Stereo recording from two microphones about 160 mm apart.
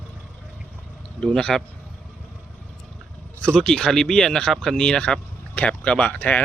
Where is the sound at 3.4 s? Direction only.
5° left (ahead or behind).